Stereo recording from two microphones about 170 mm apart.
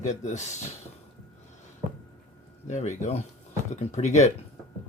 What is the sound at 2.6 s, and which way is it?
Speech, 45° left (ahead or behind).